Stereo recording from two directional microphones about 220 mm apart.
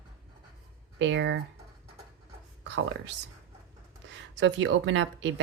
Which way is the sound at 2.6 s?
55° right (ahead or behind).